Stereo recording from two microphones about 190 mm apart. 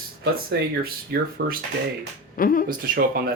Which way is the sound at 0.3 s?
50° right (ahead or behind).